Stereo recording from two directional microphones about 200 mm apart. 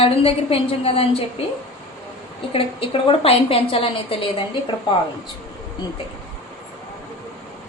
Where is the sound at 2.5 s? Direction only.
30° left (ahead or behind).